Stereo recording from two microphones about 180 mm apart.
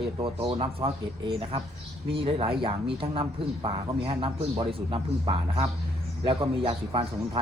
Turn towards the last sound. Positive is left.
turn(degrees=-30)  # may be behind; listen again after turning